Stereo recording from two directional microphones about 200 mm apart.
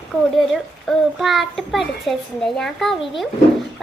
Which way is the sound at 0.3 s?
Centre (ahead or behind).